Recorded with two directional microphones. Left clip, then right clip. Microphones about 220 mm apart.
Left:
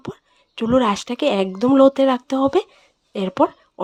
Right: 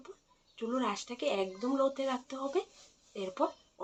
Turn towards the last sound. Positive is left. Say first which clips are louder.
# left 15 dB
turn(degrees=55)  # may be behind; listen again after turning